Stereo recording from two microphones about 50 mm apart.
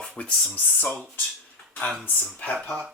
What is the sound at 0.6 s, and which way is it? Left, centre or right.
Speech, left.